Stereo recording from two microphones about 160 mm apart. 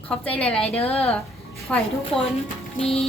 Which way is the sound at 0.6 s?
40° left (ahead or behind).